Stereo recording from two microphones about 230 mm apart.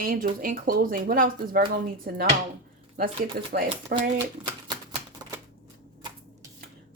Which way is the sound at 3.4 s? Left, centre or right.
Right.